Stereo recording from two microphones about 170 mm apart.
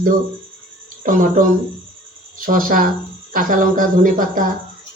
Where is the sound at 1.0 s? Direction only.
50° right (ahead or behind).